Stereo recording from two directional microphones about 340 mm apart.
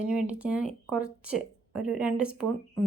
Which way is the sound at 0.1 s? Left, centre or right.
Centre.